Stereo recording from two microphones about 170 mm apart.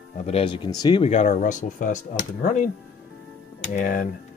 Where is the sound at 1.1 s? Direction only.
45° left (ahead or behind).